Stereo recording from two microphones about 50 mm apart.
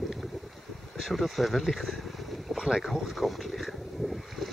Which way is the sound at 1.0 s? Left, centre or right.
Centre.